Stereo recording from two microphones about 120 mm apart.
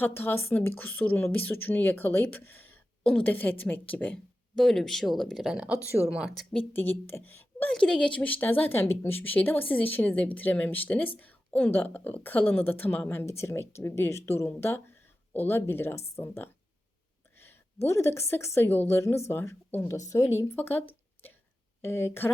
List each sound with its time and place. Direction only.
0.0 s speech: 15° left (ahead or behind)
4.5 s speech: 5° left (ahead or behind)
7.1 s a woman's voice: 15° left (ahead or behind)
20.6 s a sound: 15° left (ahead or behind)
21.8 s a woman's voice: 20° left (ahead or behind)